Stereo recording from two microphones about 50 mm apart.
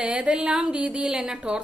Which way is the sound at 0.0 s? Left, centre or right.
Right.